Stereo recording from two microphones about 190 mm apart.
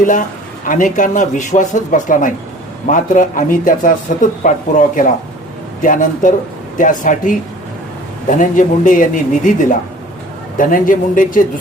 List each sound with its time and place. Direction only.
0.7 s speech: 45° left (ahead or behind)